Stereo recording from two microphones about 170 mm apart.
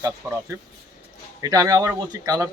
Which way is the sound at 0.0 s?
15° right (ahead or behind).